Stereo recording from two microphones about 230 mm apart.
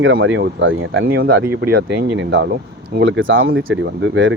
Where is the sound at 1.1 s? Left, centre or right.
Right.